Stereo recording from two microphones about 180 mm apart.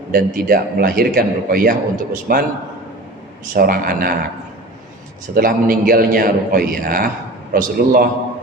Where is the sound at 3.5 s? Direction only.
55° right (ahead or behind).